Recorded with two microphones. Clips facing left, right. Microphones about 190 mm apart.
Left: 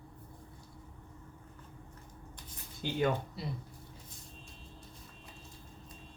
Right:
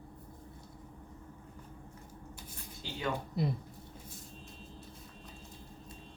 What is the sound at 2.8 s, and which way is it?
Speech, 55° left (ahead or behind).